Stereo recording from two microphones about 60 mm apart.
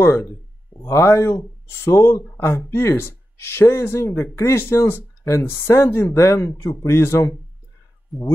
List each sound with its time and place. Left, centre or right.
0.0 s speech: left
2.4 s speech: left
8.1 s speech: centre